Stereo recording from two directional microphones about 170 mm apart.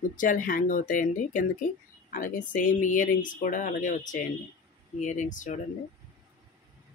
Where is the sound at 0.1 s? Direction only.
50° left (ahead or behind).